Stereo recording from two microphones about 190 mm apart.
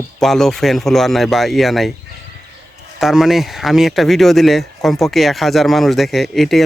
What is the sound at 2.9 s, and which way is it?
Speech, centre (ahead or behind).